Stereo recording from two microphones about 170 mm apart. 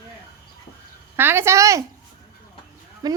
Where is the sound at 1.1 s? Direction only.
15° right (ahead or behind).